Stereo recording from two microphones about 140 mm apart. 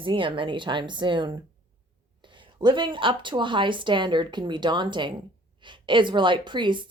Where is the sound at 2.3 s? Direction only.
35° right (ahead or behind).